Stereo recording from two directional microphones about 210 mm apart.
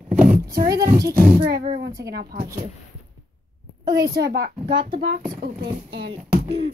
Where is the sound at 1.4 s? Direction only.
45° right (ahead or behind).